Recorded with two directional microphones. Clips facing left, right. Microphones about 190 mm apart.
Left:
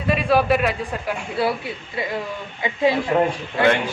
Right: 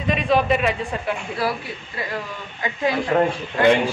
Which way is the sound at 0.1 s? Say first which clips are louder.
Left 1 dB; 5° left (ahead or behind).